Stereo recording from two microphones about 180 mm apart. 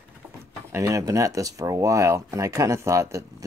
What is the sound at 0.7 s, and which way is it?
Speech, 15° right (ahead or behind).